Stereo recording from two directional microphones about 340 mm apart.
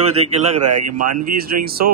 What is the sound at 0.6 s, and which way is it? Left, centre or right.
Speech, right.